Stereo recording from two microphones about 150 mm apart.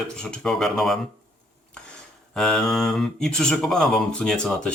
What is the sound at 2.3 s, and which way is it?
Speech, 5° left (ahead or behind).